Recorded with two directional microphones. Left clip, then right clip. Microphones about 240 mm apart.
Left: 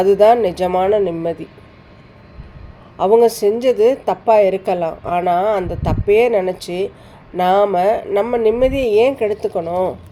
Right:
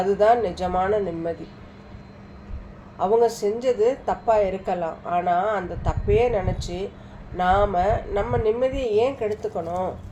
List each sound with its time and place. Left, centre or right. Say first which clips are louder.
0.0 s a woman's voice: left 8 dB; left
3.0 s a woman's voice: left 8 dB; left